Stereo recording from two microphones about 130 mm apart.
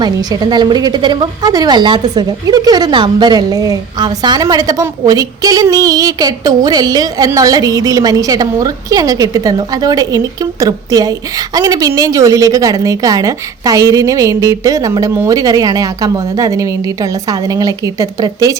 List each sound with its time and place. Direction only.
0.0 s a woman's voice: 30° right (ahead or behind)